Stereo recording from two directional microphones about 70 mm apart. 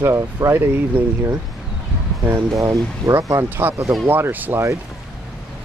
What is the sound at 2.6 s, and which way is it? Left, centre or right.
Speech, right.